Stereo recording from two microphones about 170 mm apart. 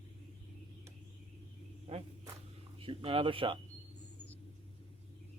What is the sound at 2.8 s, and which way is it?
Speech, 30° right (ahead or behind).